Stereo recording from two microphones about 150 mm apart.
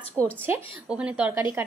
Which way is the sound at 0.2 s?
Centre (ahead or behind).